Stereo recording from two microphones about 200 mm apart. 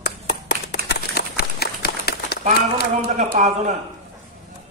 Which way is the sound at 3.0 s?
40° right (ahead or behind).